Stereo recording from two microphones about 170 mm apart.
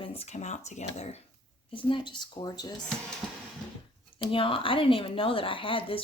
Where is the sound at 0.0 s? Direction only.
35° left (ahead or behind).